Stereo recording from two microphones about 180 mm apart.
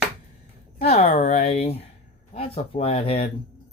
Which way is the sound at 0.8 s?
35° left (ahead or behind).